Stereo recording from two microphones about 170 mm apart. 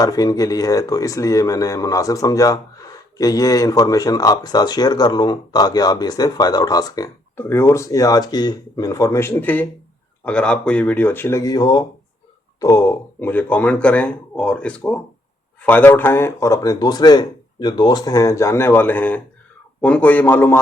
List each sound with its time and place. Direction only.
0.0 s speech: 20° left (ahead or behind)